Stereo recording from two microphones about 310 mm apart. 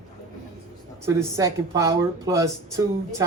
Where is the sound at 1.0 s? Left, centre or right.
Centre.